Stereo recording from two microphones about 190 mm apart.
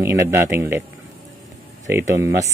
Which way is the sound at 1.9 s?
15° right (ahead or behind).